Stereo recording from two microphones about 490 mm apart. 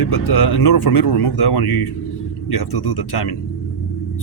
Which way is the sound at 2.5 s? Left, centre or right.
Left.